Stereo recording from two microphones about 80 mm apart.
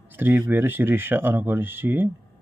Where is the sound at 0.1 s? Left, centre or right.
Right.